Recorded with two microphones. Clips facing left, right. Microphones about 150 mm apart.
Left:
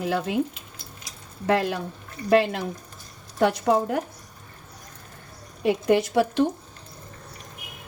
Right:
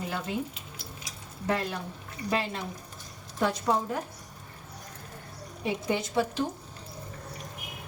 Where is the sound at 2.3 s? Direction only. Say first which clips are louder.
Left 11 dB; 75° left (ahead or behind).